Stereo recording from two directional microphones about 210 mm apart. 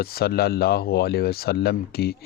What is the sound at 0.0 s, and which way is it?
Speech, 45° left (ahead or behind).